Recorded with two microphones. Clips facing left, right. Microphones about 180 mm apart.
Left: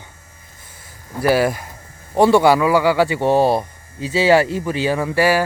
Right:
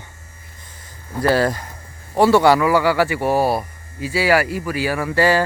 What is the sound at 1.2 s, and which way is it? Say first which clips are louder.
Speech: left 1 dB; 10° left (ahead or behind).